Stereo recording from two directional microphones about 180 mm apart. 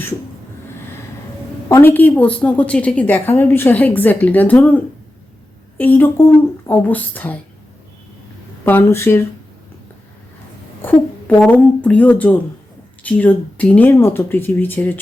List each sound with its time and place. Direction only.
1.7 s a woman's voice: 10° left (ahead or behind)
8.6 s a woman's voice: 15° left (ahead or behind)
10.8 s a woman's voice: 10° left (ahead or behind)